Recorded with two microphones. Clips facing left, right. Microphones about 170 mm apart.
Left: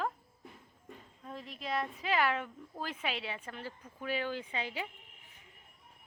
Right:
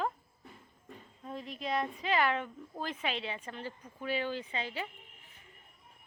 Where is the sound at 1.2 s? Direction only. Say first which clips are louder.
Right 3 dB; centre (ahead or behind).